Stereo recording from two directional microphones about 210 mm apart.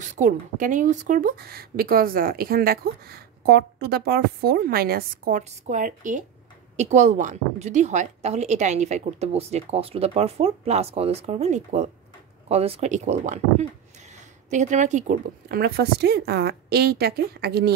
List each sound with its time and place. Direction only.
0.0 s a woman's voice: 35° right (ahead or behind)